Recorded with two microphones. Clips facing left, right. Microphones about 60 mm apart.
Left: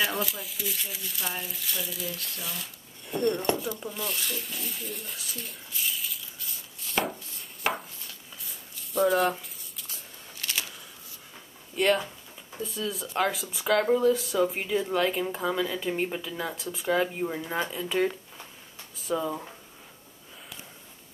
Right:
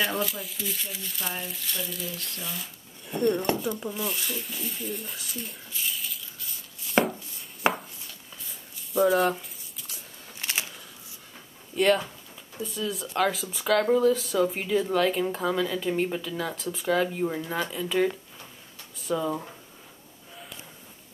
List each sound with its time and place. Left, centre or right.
0.0 s speech: centre
10.4 s a sound: right
11.7 s speech: centre
12.7 s speech: centre
13.1 s speech: centre
19.0 s speech: centre